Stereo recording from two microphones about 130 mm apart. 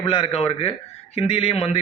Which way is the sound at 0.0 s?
45° left (ahead or behind).